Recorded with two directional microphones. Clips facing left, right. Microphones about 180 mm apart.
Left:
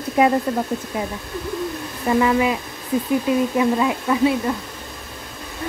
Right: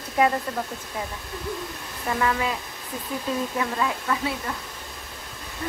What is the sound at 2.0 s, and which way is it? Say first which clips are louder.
Speech: left 8 dB; 20° left (ahead or behind).